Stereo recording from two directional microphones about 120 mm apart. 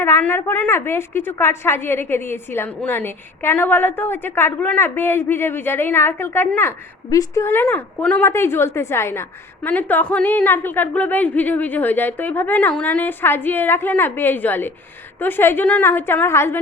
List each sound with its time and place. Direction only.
0.0 s a woman's voice: 20° left (ahead or behind)